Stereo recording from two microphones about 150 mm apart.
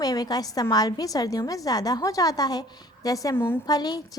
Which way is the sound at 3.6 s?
25° left (ahead or behind).